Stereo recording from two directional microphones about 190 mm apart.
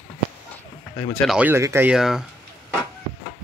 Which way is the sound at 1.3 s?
10° right (ahead or behind).